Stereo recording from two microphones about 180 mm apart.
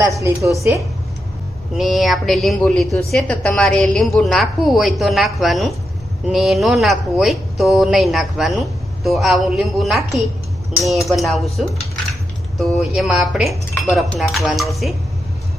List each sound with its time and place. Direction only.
0.0 s a woman's voice: 15° right (ahead or behind)
1.7 s a woman's voice: centre (ahead or behind)